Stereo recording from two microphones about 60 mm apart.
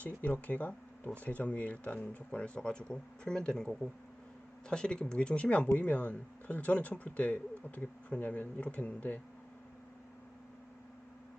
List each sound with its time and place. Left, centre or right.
0.0 s speech: left